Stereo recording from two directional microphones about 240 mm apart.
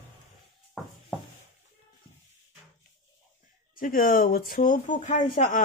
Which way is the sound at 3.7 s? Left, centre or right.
Left.